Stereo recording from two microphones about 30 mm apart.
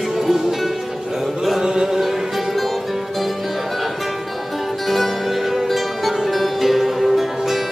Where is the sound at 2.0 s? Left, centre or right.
Centre.